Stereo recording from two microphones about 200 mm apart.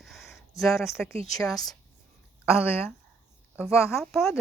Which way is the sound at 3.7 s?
15° left (ahead or behind).